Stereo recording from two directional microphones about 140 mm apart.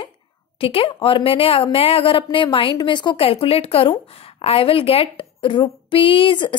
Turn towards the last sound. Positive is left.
turn(degrees=35)  # may be behind; listen again after turning